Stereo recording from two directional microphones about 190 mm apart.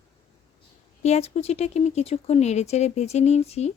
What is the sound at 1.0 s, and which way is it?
Speech, 35° left (ahead or behind).